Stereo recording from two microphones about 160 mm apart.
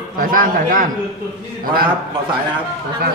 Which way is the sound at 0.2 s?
60° right (ahead or behind).